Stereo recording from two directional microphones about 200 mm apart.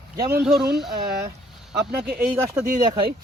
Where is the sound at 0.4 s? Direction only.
Centre (ahead or behind).